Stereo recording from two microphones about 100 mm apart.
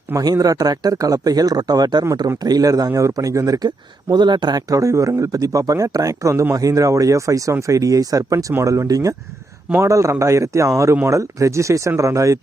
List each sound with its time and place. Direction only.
0.2 s speech: 35° right (ahead or behind)
4.1 s a man's voice: 50° right (ahead or behind); by 12.4 s 30° right (ahead or behind)